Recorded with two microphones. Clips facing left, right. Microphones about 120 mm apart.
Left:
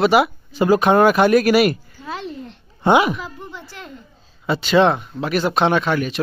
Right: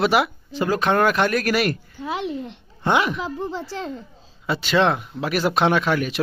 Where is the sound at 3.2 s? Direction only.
30° right (ahead or behind).